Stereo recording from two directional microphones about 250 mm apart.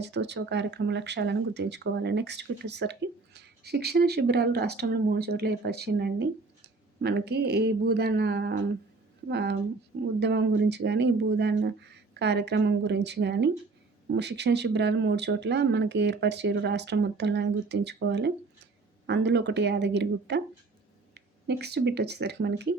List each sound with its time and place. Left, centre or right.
0.0 s speech: right
21.4 s speech: right